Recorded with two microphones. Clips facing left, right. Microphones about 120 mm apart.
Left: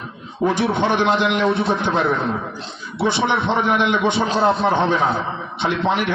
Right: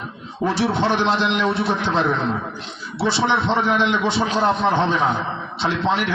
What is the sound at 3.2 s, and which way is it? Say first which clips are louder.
A man's voice: right 1 dB; 15° left (ahead or behind).